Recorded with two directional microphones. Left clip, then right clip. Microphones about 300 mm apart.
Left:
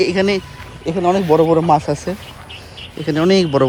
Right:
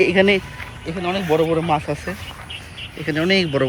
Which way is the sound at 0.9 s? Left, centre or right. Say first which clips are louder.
Left 6 dB; centre.